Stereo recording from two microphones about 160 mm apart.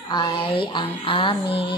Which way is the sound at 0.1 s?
30° left (ahead or behind).